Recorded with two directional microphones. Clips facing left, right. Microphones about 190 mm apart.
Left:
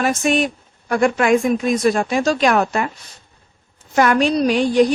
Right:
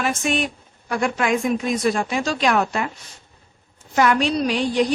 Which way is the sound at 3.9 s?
50° left (ahead or behind).